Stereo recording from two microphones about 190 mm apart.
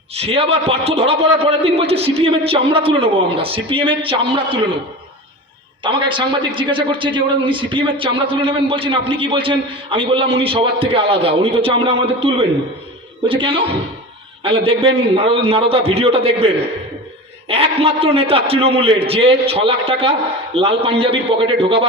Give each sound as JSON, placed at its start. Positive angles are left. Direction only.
{"t": 0.2, "sound": "a man's voice", "side_deg": -30}
{"t": 5.8, "sound": "a man's voice", "side_deg": -25}
{"t": 17.5, "sound": "a man's voice", "side_deg": -30}